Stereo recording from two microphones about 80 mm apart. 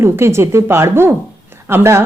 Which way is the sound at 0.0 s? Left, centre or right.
Right.